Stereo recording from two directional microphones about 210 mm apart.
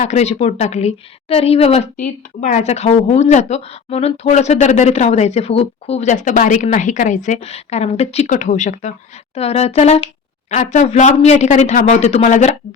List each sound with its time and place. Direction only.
0.0 s a woman's voice: 30° left (ahead or behind)